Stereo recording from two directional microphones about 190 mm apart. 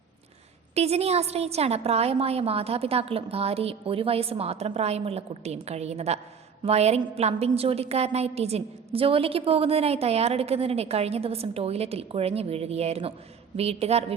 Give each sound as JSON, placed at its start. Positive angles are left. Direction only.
{"t": 0.8, "sound": "a woman's voice", "side_deg": -35}